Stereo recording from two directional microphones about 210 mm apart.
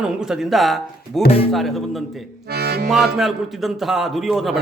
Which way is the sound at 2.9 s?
Centre (ahead or behind).